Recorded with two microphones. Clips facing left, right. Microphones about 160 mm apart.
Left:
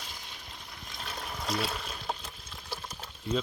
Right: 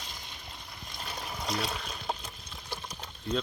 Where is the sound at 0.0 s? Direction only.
5° left (ahead or behind).